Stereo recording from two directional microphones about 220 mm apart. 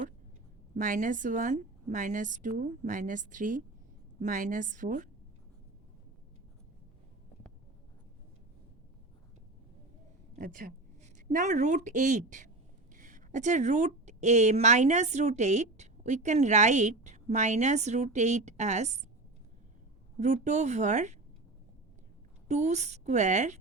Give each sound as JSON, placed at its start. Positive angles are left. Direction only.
{"t": 0.7, "sound": "a woman's voice", "side_deg": -35}
{"t": 10.3, "sound": "a woman's voice", "side_deg": -40}
{"t": 20.1, "sound": "a woman's voice", "side_deg": -30}
{"t": 22.4, "sound": "a woman's voice", "side_deg": -30}